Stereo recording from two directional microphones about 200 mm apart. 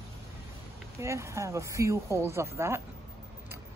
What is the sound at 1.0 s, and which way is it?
Speech, 15° right (ahead or behind).